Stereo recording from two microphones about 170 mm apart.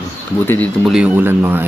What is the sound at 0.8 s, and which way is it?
Speech, 5° right (ahead or behind).